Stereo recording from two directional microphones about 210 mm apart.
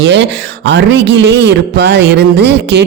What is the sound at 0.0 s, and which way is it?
Speech, 55° right (ahead or behind).